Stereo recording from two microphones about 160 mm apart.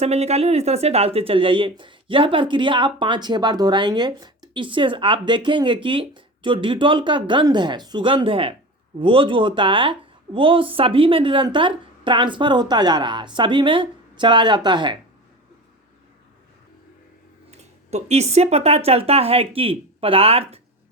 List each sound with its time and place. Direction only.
0.0 s speech: 40° right (ahead or behind)
17.5 s speech: 45° right (ahead or behind)